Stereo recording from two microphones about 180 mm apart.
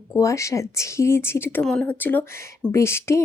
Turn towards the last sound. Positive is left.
turn(degrees=15)  # may be behind; listen again after turning